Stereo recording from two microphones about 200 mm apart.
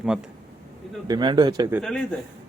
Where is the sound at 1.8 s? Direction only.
5° left (ahead or behind).